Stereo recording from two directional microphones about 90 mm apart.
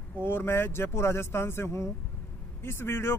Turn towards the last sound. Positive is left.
turn(degrees=25)  # may be behind; listen again after turning